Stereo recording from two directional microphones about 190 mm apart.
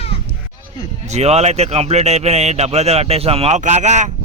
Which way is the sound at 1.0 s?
35° right (ahead or behind).